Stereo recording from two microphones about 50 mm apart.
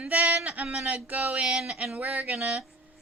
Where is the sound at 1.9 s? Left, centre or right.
Right.